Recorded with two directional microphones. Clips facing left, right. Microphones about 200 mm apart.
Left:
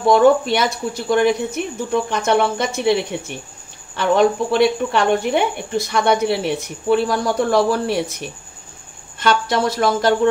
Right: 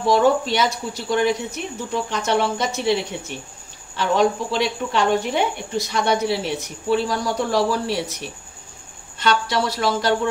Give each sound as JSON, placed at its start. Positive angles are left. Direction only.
{"t": 0.1, "sound": "speech", "side_deg": 55}
{"t": 9.2, "sound": "speech", "side_deg": 50}